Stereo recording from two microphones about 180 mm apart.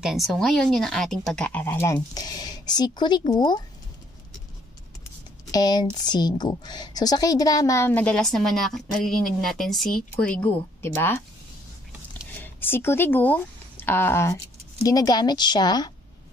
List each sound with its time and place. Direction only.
0.0 s speech: centre (ahead or behind); by 3.6 s 25° left (ahead or behind)
5.5 s a woman's voice: 20° left (ahead or behind)
12.4 s a woman's voice: 10° left (ahead or behind)